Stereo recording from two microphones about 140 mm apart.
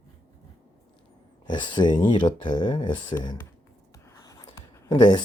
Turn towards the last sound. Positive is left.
turn(degrees=30)  # may be behind; listen again after turning